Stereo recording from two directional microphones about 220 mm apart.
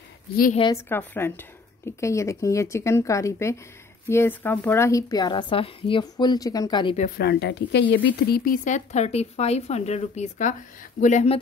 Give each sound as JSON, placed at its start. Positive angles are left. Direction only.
{"t": 0.8, "sound": "a woman's voice", "side_deg": 10}
{"t": 7.0, "sound": "speech", "side_deg": 45}